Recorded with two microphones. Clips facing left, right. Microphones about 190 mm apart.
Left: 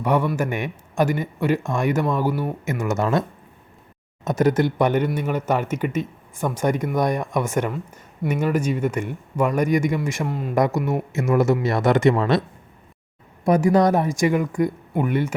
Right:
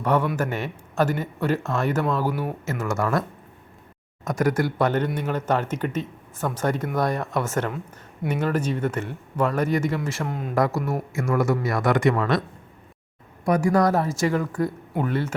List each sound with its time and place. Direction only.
0.0 s a man's voice: 10° left (ahead or behind)
2.3 s speech: 10° right (ahead or behind)
2.8 s speech: 20° left (ahead or behind)
10.2 s speech: centre (ahead or behind)
10.5 s speech: 20° left (ahead or behind)
13.4 s speech: 20° left (ahead or behind)